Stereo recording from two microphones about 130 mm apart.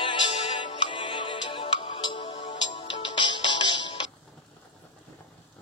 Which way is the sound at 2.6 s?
40° left (ahead or behind).